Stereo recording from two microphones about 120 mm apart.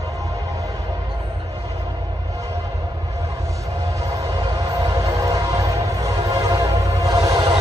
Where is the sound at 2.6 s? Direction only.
30° right (ahead or behind).